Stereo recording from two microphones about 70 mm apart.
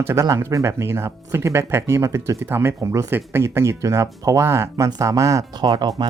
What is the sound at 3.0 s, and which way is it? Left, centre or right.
Speech, right.